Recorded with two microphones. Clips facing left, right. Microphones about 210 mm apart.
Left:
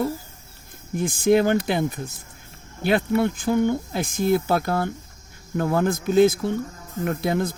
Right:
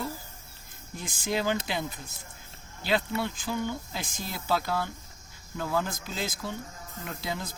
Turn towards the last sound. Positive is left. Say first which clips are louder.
# left 12 dB
turn(degrees=55)  # may be behind; listen again after turning